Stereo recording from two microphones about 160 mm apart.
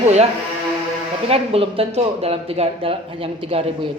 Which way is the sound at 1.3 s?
35° right (ahead or behind).